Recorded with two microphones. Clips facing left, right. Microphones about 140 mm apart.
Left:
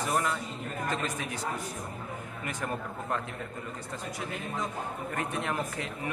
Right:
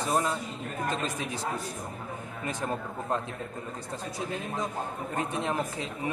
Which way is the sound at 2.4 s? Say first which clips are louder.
Right 3 dB; 30° right (ahead or behind).